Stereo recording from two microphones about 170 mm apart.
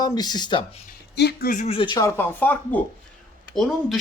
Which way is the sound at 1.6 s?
30° left (ahead or behind).